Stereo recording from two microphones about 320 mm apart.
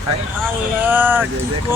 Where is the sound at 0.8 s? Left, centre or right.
Centre.